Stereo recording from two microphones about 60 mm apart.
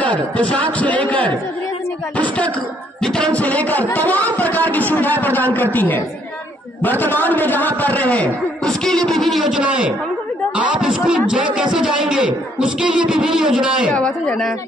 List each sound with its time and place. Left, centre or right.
0.0 s a man's voice: left
8.6 s music: centre
9.5 s a man's voice: centre
10.5 s a sound: centre
10.9 s a man's voice: centre
13.9 s a man's voice: centre